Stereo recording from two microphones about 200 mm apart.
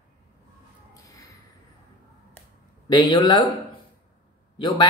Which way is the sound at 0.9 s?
15° left (ahead or behind).